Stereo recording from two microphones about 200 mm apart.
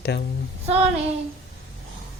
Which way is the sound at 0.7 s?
30° right (ahead or behind).